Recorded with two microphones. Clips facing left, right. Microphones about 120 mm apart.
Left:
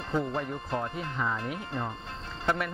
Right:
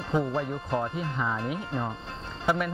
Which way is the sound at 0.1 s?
15° right (ahead or behind).